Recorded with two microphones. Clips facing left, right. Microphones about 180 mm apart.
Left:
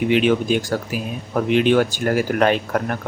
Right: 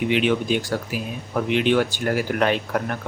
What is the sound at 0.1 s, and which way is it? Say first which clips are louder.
Speech: left 4 dB; 45° left (ahead or behind).